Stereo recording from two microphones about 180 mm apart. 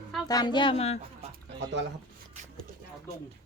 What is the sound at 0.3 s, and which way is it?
Speech, 20° left (ahead or behind).